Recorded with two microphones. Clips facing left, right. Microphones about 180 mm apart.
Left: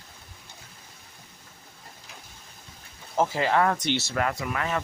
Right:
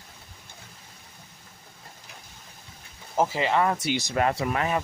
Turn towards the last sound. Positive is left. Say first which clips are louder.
# right 3 dB
turn(degrees=-30)  # may be behind; listen again after turning